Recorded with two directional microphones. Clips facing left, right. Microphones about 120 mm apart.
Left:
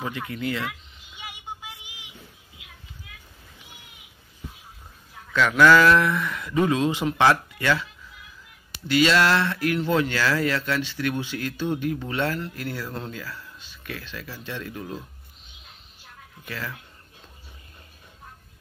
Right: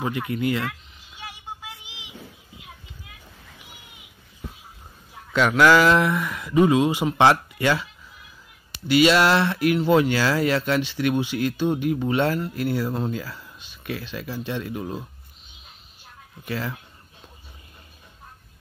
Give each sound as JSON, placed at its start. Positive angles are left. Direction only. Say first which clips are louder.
{"t": 0.0, "sound": "speech", "louder": "right 5 dB", "side_deg": -15}
{"t": 5.3, "sound": "speech", "louder": "even", "side_deg": -20}
{"t": 8.8, "sound": "speech", "louder": "right 3 dB", "side_deg": -15}
{"t": 16.4, "sound": "speech", "louder": "right 5 dB", "side_deg": -25}